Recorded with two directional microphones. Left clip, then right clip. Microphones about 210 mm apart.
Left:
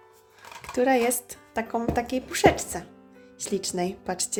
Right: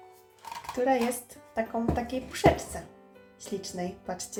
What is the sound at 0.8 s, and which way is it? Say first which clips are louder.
Speech: left 4 dB; 40° left (ahead or behind).